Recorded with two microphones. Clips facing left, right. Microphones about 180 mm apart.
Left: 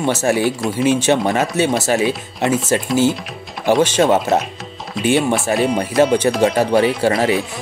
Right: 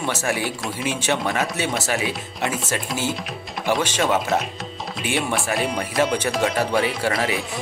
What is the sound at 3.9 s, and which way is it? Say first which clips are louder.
Speech: left 7 dB; 40° left (ahead or behind).